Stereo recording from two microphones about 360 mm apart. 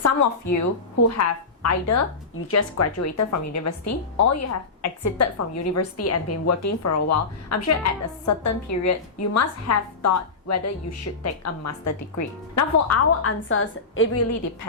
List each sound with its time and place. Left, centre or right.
0.0 s a woman's voice: left